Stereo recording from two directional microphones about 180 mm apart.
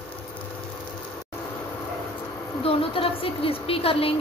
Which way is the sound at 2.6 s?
30° left (ahead or behind).